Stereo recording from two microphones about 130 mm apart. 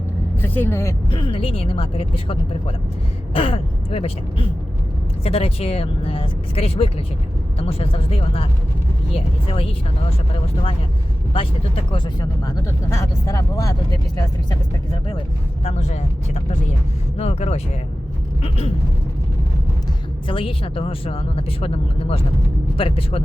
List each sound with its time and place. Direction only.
0.4 s speech: 15° left (ahead or behind)
1.1 s speech: 40° left (ahead or behind)
11.3 s speech: 40° left (ahead or behind); by 13.7 s 25° left (ahead or behind)
15.6 s speech: 60° left (ahead or behind)
20.2 s speech: 45° left (ahead or behind)